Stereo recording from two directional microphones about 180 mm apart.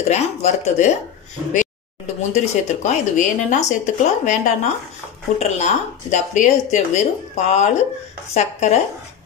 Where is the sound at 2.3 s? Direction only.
40° left (ahead or behind).